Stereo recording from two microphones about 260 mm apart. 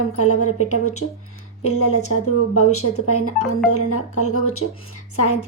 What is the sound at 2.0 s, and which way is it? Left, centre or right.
A woman's voice, left.